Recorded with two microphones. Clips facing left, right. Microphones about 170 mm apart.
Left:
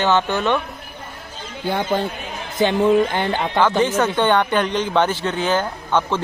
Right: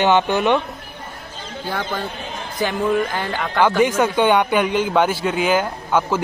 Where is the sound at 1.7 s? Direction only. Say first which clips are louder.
Left 5 dB; 25° left (ahead or behind).